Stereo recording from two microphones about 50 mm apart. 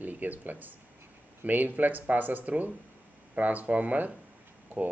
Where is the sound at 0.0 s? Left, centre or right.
Right.